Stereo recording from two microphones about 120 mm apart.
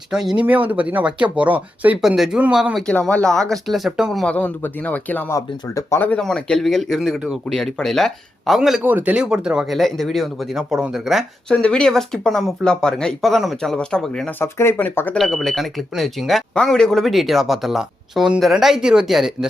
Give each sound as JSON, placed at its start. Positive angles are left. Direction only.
{"t": 0.1, "sound": "speech", "side_deg": -5}
{"t": 2.0, "sound": "speech", "side_deg": 0}
{"t": 2.8, "sound": "speech", "side_deg": 10}
{"t": 4.3, "sound": "speech", "side_deg": 15}
{"t": 5.3, "sound": "speech", "side_deg": 25}
{"t": 6.0, "sound": "speech", "side_deg": 10}
{"t": 8.8, "sound": "speech", "side_deg": -15}
{"t": 15.2, "sound": "speech", "side_deg": 0}